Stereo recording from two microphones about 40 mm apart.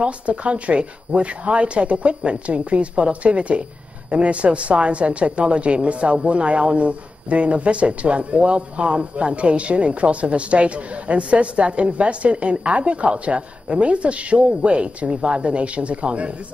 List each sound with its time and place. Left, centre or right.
0.0 s speech: right